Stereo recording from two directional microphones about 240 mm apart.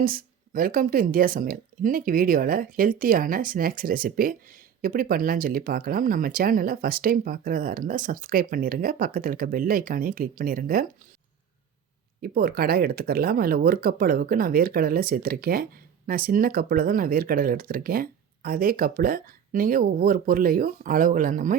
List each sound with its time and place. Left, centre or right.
0.0 s speech: right
12.2 s speech: right